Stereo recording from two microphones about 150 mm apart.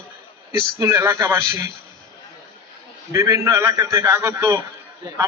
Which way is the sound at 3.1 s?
20° right (ahead or behind).